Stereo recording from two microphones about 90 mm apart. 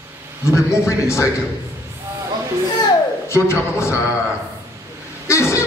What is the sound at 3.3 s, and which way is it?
Speech, 30° left (ahead or behind).